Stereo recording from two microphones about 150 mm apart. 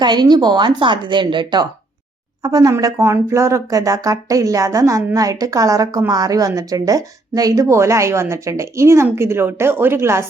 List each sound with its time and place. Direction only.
0.0 s a woman's voice: 30° right (ahead or behind)